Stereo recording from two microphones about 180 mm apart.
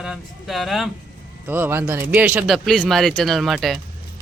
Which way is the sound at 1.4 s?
10° right (ahead or behind).